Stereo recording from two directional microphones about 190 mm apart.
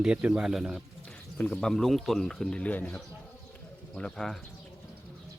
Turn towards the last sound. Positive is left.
turn(degrees=0)  # may be behind; listen again after turning